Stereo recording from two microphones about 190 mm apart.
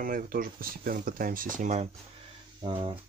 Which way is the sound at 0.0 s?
50° right (ahead or behind).